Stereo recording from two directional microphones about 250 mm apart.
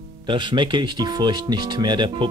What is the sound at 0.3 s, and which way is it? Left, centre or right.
Speech, centre.